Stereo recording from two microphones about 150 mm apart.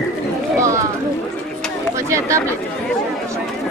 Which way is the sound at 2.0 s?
20° right (ahead or behind).